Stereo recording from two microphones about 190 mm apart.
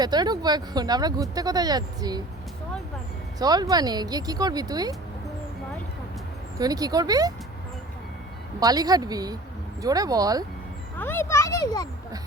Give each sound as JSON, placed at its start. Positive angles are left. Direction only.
{"t": 0.0, "sound": "speech", "side_deg": -20}
{"t": 3.3, "sound": "speech", "side_deg": -20}
{"t": 6.6, "sound": "speech", "side_deg": -20}
{"t": 8.6, "sound": "speech", "side_deg": -20}
{"t": 10.9, "sound": "a child's voice", "side_deg": 10}